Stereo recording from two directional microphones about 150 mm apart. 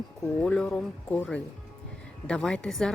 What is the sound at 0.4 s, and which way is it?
A woman's voice, 5° left (ahead or behind).